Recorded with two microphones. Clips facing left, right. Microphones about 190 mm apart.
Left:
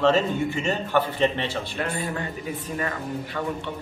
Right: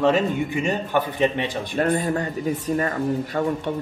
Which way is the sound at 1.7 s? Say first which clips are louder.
Right 10 dB; 40° right (ahead or behind).